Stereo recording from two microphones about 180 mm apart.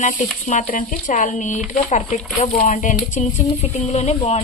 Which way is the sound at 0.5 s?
45° left (ahead or behind).